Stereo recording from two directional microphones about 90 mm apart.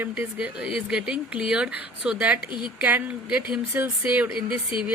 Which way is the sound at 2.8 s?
20° right (ahead or behind).